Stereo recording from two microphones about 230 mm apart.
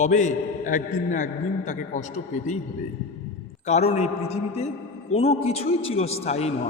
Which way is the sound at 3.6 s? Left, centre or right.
Left.